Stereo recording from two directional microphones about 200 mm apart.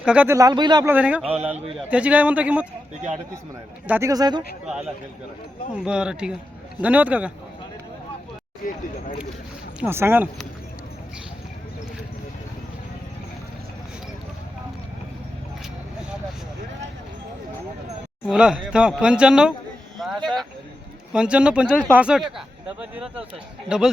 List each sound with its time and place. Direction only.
0.0 s speech: 5° right (ahead or behind)
0.9 s speech: 5° right (ahead or behind)
3.8 s speech: 10° right (ahead or behind)
5.7 s speech: 5° right (ahead or behind)
8.6 s speech: 45° left (ahead or behind)
9.8 s speech: 10° right (ahead or behind)
18.3 s speech: 5° right (ahead or behind)